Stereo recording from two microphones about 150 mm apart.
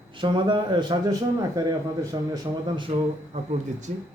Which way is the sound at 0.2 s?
30° right (ahead or behind).